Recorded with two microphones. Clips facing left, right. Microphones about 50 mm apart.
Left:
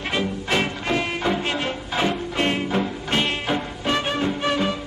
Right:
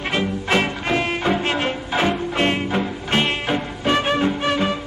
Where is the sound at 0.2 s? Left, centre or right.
Right.